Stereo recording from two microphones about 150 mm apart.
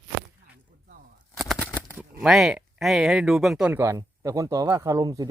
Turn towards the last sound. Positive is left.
turn(degrees=-25)  # may be behind; listen again after turning